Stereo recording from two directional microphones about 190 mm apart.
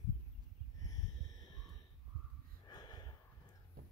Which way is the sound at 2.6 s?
20° left (ahead or behind).